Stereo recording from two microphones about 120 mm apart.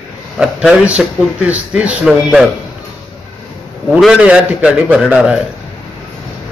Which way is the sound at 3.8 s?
Centre (ahead or behind).